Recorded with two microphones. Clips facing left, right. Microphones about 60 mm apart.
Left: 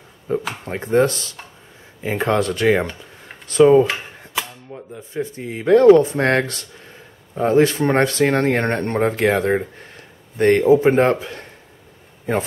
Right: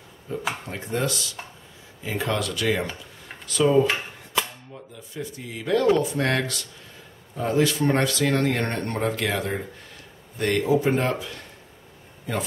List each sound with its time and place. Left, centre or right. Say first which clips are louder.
0.3 s a sound: left 9 dB; left
0.7 s speech: left 14 dB; left
4.9 s speech: left 8 dB; left